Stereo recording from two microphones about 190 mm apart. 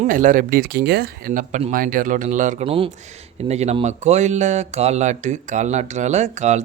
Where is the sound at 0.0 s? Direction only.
45° right (ahead or behind).